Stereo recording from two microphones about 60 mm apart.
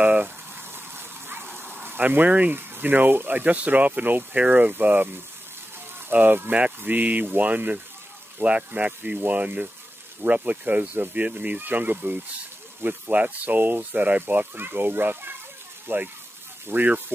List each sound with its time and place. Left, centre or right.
0.0 s boiling: right
1.3 s a sound: right
2.5 s speech: right
6.1 s speech: right